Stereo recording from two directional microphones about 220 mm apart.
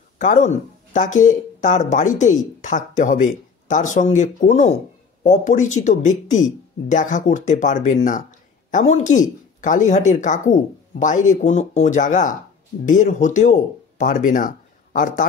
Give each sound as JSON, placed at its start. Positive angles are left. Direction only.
{"t": 0.2, "sound": "speech", "side_deg": 35}